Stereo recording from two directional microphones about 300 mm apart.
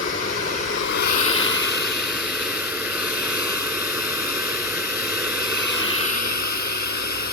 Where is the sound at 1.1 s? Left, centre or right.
Left.